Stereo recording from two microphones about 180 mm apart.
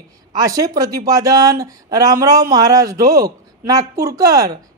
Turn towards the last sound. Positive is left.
turn(degrees=-20)  # may be behind; listen again after turning